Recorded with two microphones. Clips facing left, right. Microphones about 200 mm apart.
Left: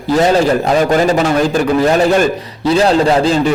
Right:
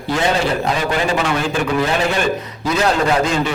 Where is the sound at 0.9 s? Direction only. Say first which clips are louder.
Left 7 dB; 40° left (ahead or behind).